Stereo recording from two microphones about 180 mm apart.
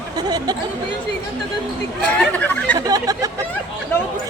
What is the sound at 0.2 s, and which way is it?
Speech, 20° right (ahead or behind).